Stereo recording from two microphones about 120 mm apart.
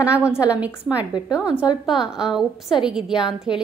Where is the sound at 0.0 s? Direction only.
10° right (ahead or behind).